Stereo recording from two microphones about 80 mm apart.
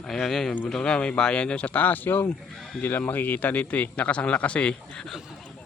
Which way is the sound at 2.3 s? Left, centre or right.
Centre.